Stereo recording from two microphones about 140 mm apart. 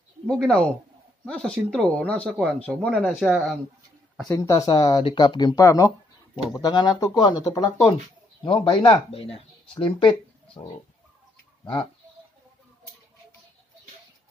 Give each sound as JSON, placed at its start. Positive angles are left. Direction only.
{"t": 0.3, "sound": "speech", "side_deg": 5}
{"t": 4.3, "sound": "speech", "side_deg": 25}
{"t": 4.6, "sound": "speech", "side_deg": 35}
{"t": 5.6, "sound": "speech", "side_deg": 25}
{"t": 8.5, "sound": "speech", "side_deg": 40}